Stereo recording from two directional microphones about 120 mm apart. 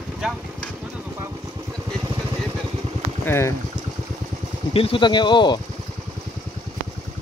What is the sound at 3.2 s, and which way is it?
Speech, 20° left (ahead or behind).